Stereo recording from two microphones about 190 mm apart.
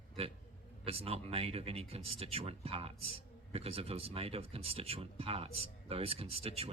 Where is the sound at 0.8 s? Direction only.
30° right (ahead or behind).